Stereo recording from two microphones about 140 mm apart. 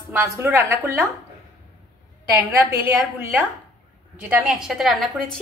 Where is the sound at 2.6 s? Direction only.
20° right (ahead or behind).